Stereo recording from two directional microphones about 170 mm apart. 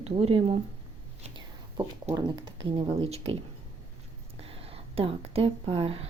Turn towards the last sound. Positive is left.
turn(degrees=-35)  # may be behind; listen again after turning